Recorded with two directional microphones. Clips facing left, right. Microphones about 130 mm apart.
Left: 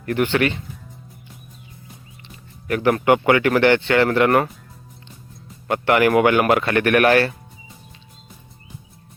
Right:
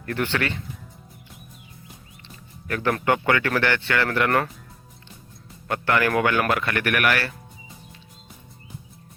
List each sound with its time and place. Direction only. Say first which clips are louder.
0.0 s speech: left 6 dB; 15° left (ahead or behind)
2.2 s music: left 5 dB; 15° left (ahead or behind)
3.0 s speech: left 6 dB; 15° left (ahead or behind)
5.6 s speech: left 6 dB; 20° left (ahead or behind)